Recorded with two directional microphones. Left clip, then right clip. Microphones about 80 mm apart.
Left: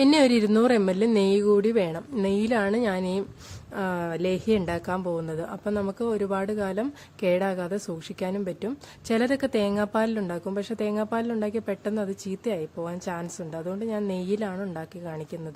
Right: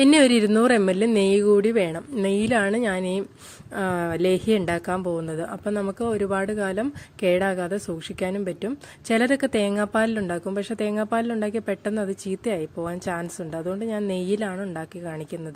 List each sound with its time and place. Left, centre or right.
0.0 s a woman's voice: right
3.8 s a woman's voice: right